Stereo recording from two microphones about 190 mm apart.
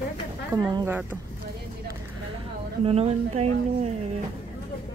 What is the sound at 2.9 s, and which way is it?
Speech, 35° right (ahead or behind).